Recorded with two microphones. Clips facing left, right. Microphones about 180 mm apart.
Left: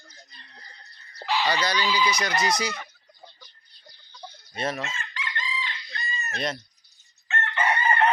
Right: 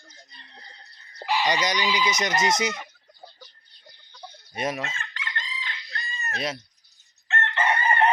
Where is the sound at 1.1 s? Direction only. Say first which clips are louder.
Right 1 dB; 15° right (ahead or behind).